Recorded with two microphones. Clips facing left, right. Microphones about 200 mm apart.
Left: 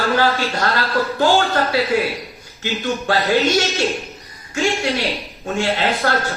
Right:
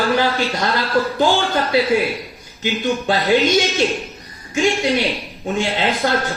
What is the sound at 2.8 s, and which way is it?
A man's voice, 15° right (ahead or behind).